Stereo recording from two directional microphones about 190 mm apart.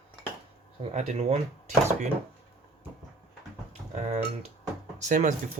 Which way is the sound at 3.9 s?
35° right (ahead or behind).